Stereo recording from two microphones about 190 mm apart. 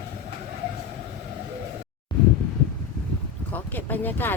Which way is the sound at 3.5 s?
10° left (ahead or behind).